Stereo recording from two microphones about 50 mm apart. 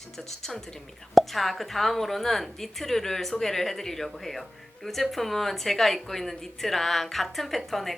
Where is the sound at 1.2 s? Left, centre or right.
Centre.